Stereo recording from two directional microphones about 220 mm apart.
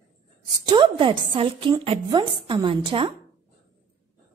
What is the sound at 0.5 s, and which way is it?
A woman's voice, 20° right (ahead or behind).